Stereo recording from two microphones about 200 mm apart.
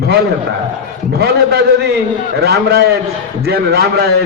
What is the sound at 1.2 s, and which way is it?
A man's voice, 55° right (ahead or behind).